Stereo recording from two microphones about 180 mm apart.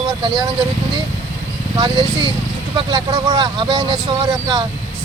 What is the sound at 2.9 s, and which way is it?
Speech, 20° right (ahead or behind).